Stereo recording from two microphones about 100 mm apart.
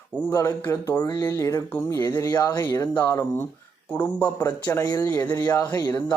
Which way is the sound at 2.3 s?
40° left (ahead or behind).